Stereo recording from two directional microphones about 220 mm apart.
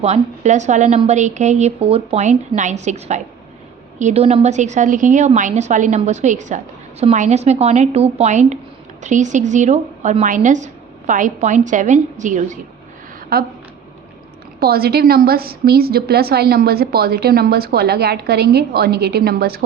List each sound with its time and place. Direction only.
0.0 s a woman's voice: 30° right (ahead or behind)
14.6 s a woman's voice: 45° right (ahead or behind)